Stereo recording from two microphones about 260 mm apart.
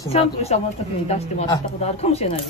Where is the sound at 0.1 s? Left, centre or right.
Left.